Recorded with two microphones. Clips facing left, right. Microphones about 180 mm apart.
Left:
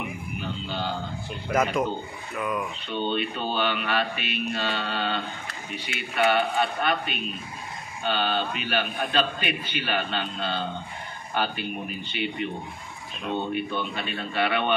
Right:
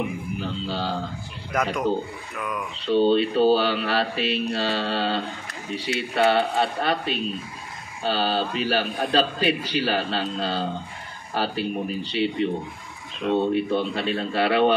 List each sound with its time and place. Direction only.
0.4 s a man's voice: 30° right (ahead or behind)
1.5 s speech: centre (ahead or behind)
2.8 s a man's voice: 35° right (ahead or behind)